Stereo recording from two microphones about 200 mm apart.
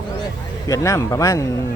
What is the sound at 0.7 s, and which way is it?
Speech, 15° left (ahead or behind).